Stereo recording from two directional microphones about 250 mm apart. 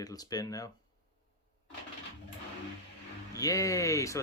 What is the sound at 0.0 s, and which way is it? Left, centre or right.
Speech, centre.